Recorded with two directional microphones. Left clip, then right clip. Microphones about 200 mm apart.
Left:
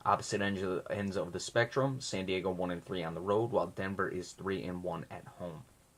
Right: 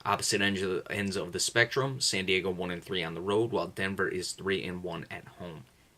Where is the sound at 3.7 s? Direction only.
40° right (ahead or behind).